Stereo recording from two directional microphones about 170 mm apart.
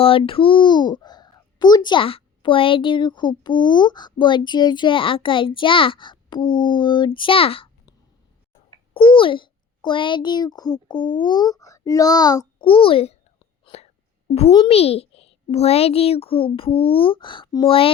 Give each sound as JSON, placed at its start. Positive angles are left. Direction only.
{"t": 0.0, "sound": "speech", "side_deg": 35}
{"t": 8.9, "sound": "a child's voice", "side_deg": 30}